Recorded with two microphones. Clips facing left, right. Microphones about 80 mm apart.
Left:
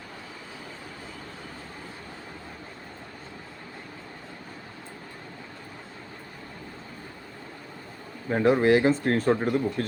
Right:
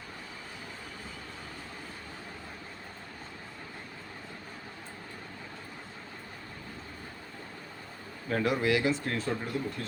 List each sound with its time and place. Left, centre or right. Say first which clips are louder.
8.3 s speech: left 7 dB; left
8.5 s speech: left 7 dB; left